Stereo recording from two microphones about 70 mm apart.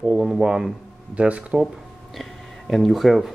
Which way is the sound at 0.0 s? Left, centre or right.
Centre.